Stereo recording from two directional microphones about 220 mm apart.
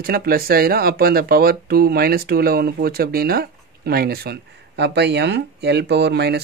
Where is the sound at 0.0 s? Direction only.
45° right (ahead or behind).